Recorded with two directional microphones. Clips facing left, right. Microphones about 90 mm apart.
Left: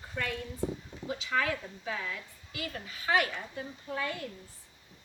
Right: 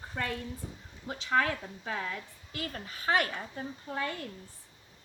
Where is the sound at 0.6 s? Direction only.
70° left (ahead or behind).